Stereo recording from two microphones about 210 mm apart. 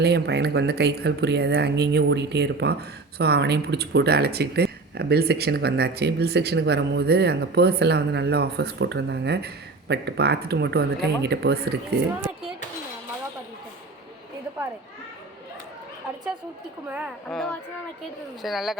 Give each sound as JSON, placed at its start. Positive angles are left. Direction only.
{"t": 0.0, "sound": "speech", "side_deg": -55}
{"t": 17.2, "sound": "a child's voice", "side_deg": 5}